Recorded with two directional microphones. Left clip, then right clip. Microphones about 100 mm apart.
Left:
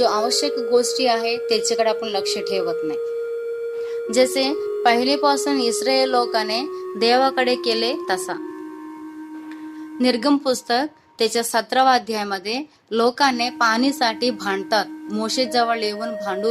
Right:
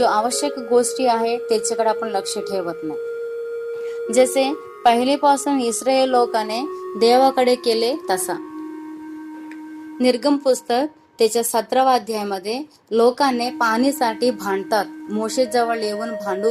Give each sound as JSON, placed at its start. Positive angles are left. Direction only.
{"t": 0.0, "sound": "a woman's voice", "side_deg": -10}
{"t": 4.1, "sound": "a woman's voice", "side_deg": -10}
{"t": 5.5, "sound": "music", "side_deg": -10}
{"t": 10.0, "sound": "a woman's voice", "side_deg": -5}
{"t": 15.5, "sound": "a woman's voice", "side_deg": 0}